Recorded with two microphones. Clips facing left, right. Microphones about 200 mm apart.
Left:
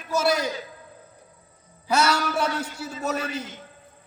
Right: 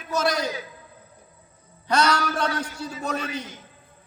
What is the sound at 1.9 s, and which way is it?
A man's voice, 10° left (ahead or behind).